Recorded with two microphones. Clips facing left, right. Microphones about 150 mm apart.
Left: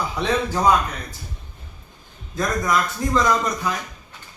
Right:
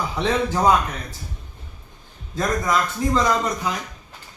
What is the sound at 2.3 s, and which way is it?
A man's voice, 25° right (ahead or behind).